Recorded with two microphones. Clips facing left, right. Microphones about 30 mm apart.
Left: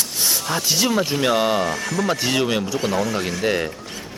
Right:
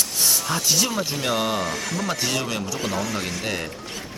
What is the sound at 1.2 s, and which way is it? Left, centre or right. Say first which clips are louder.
Speech: left 5 dB; left.